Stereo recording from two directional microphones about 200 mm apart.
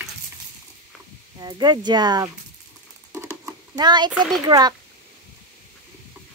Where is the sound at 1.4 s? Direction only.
20° right (ahead or behind).